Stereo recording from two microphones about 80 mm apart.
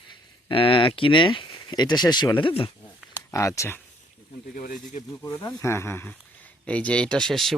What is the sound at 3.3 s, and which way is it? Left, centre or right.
Speech, left.